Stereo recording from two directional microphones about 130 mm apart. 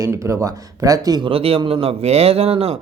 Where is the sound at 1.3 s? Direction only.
45° right (ahead or behind).